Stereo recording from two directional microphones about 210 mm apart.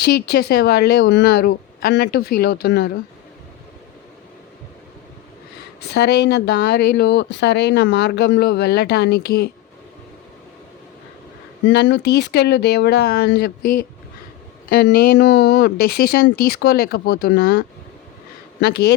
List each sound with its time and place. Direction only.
0.0 s speech: 50° left (ahead or behind)
5.9 s speech: 55° left (ahead or behind)
11.6 s speech: 55° left (ahead or behind)